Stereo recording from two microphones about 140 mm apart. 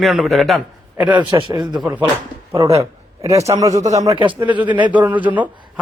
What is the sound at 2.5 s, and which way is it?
A man's voice, 25° right (ahead or behind).